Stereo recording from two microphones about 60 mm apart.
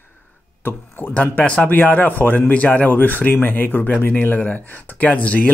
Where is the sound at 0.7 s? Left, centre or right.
Left.